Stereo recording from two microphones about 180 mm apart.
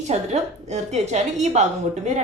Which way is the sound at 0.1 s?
40° right (ahead or behind).